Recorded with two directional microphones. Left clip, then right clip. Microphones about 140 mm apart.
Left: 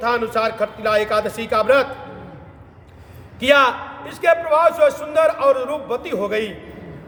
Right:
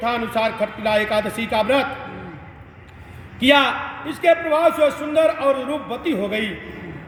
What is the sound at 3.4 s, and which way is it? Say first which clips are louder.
A man's voice: left 1 dB; 25° left (ahead or behind).